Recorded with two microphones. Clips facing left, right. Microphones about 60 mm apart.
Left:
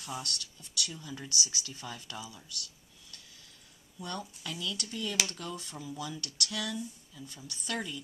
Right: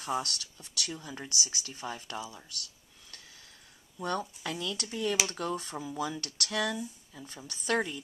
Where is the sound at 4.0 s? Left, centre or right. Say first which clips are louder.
Right 6 dB; right.